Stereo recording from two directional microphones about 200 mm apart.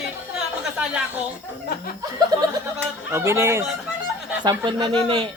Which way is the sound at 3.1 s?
15° right (ahead or behind).